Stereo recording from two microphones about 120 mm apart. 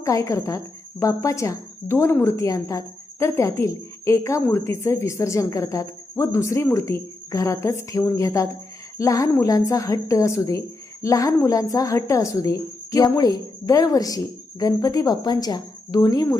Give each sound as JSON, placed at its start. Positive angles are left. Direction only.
{"t": 0.0, "sound": "speech", "side_deg": 25}